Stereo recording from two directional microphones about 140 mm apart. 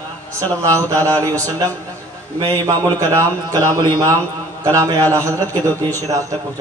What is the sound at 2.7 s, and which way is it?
Speech, 25° right (ahead or behind).